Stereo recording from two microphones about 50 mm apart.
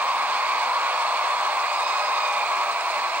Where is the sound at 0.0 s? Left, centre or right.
Right.